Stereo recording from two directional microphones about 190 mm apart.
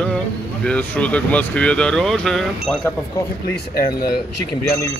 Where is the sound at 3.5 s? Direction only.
55° left (ahead or behind).